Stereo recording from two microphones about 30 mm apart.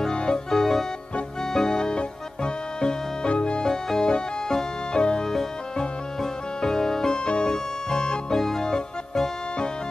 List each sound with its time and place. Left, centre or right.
0.1 s music: left
0.5 s music: centre; by 3.6 s left
3.6 s music: left
5.2 s music: centre
7.2 s music: left